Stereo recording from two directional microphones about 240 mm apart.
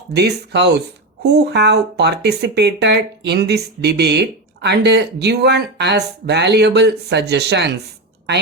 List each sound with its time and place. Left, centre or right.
0.1 s speech: right